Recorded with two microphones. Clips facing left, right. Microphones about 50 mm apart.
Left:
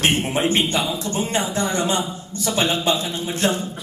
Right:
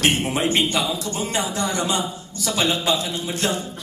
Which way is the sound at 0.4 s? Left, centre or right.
Left.